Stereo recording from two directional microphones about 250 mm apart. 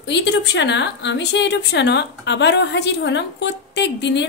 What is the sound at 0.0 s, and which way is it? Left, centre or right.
A woman's voice, left.